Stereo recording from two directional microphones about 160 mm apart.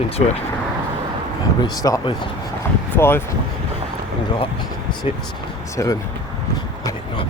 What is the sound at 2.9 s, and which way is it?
Speech, 15° left (ahead or behind).